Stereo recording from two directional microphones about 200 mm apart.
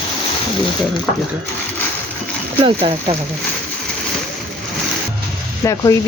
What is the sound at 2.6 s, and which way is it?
Speech, 30° right (ahead or behind).